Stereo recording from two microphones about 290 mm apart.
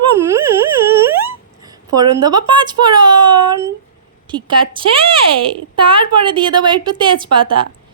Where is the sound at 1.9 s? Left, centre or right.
Centre.